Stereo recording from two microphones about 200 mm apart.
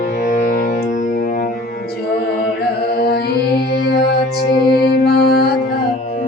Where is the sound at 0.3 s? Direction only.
45° left (ahead or behind).